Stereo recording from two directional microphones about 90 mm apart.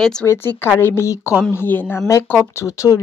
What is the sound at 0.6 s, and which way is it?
Speech, 25° left (ahead or behind).